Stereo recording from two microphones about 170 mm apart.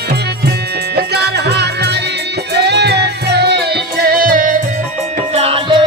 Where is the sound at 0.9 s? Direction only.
75° right (ahead or behind); by 4.6 s 55° right (ahead or behind).